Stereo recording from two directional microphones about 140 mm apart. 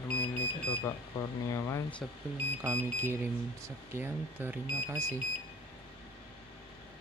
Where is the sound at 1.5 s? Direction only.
20° left (ahead or behind).